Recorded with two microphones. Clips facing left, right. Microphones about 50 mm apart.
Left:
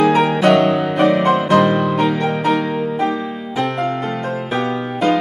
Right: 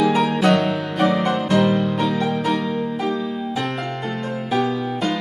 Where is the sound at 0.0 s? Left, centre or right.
Left.